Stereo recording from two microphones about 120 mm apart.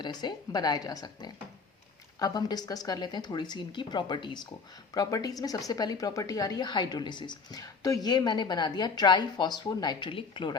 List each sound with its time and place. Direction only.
0.0 s speech: 35° left (ahead or behind)